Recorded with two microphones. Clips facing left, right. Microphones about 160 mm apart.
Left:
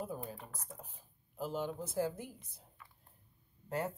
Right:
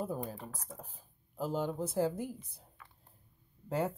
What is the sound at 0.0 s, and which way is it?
Speech, 35° right (ahead or behind).